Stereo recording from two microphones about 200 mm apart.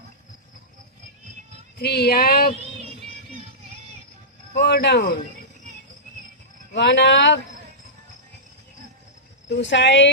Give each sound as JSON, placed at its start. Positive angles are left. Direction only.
{"t": 1.8, "sound": "speech", "side_deg": 55}
{"t": 4.5, "sound": "speech", "side_deg": 55}
{"t": 6.7, "sound": "speech", "side_deg": 60}
{"t": 9.5, "sound": "speech", "side_deg": 60}